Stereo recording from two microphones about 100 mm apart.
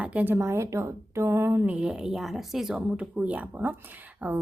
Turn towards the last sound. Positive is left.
turn(degrees=-15)  # may be behind; listen again after turning